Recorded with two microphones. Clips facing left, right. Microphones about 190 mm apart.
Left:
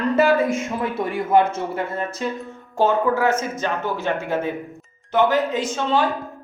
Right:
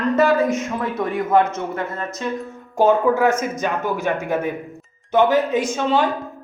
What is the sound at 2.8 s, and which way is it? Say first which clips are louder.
Speech: right 3 dB; 15° right (ahead or behind).